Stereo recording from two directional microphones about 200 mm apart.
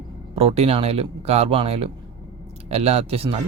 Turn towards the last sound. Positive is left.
turn(degrees=-30)  # may be behind; listen again after turning